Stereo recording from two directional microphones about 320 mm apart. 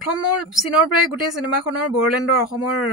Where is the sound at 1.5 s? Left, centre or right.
Left.